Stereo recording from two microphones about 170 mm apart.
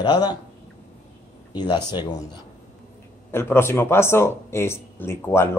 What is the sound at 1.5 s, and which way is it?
Speech, 25° left (ahead or behind).